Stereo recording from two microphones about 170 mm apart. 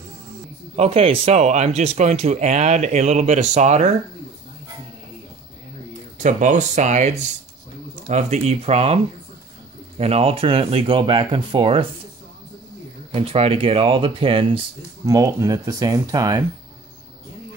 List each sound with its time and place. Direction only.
0.7 s speech: 35° right (ahead or behind)
6.1 s speech: 45° right (ahead or behind); by 11.8 s 30° right (ahead or behind)
13.1 s speech: 35° right (ahead or behind)
15.0 s speech: 20° right (ahead or behind)